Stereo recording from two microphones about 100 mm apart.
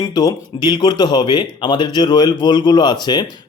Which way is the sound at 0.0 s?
40° left (ahead or behind).